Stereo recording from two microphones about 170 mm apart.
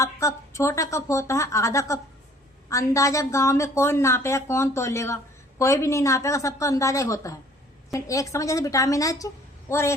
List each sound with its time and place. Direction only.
0.0 s a woman's voice: 15° left (ahead or behind)